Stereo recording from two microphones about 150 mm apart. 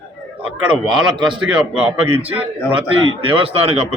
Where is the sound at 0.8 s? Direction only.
30° right (ahead or behind).